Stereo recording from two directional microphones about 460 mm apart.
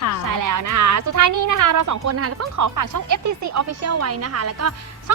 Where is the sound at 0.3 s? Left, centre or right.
Right.